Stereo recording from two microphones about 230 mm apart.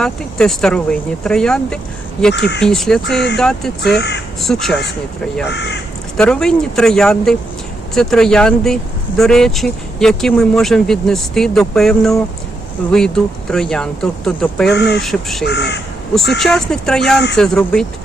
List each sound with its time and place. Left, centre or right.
0.0 s speech: centre
2.3 s speech: left
2.6 s speech: centre
3.9 s speech: left
4.4 s speech: centre
5.5 s speech: left
6.1 s speech: centre
14.8 s speech: left
15.0 s speech: centre
15.4 s speech: left
16.4 s speech: centre